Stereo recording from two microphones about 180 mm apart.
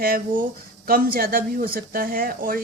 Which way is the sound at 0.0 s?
50° right (ahead or behind).